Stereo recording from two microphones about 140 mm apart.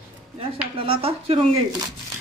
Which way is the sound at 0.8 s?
40° right (ahead or behind).